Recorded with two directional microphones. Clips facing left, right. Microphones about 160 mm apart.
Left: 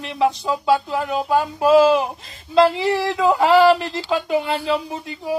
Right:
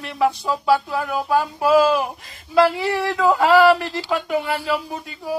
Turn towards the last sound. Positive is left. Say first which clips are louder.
# left 2 dB
turn(degrees=20)  # may be behind; listen again after turning